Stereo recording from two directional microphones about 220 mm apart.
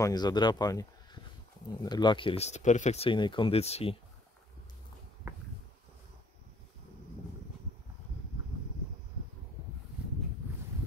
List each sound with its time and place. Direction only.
0.0 s speech: 20° left (ahead or behind)